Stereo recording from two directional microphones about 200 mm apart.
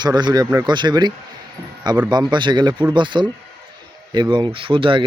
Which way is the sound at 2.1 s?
25° right (ahead or behind).